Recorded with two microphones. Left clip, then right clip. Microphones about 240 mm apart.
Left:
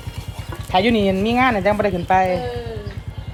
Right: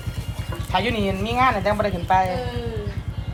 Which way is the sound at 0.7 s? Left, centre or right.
Left.